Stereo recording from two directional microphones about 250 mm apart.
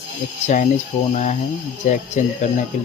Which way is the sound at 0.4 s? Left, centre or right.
Left.